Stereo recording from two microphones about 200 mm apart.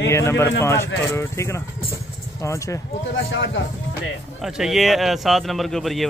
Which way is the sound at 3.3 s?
70° left (ahead or behind).